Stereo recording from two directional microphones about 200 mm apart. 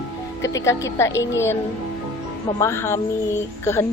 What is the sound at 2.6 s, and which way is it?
Speech, 10° left (ahead or behind).